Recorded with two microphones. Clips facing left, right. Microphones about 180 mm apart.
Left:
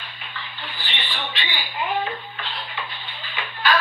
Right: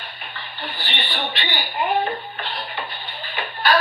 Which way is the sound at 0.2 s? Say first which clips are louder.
Right 3 dB; 60° right (ahead or behind).